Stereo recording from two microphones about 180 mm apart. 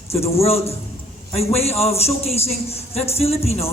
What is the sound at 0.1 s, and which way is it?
Speech, 35° left (ahead or behind).